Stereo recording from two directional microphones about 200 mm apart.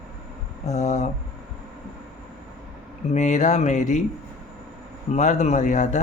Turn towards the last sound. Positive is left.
turn(degrees=40)  # may be behind; listen again after turning